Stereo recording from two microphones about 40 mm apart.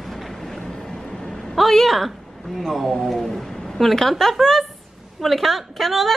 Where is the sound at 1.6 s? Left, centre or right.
Centre.